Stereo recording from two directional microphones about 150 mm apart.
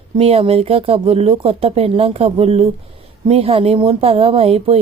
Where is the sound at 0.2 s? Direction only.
40° right (ahead or behind).